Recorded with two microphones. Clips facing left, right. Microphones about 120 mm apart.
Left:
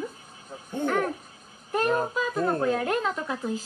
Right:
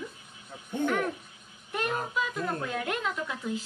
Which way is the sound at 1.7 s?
35° left (ahead or behind).